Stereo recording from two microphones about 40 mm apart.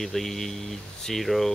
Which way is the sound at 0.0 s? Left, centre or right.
Centre.